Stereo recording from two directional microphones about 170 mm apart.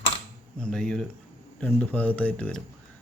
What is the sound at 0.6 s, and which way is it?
Speech, 5° left (ahead or behind).